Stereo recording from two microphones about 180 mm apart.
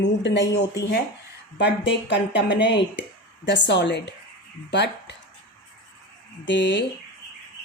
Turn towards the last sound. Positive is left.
turn(degrees=85)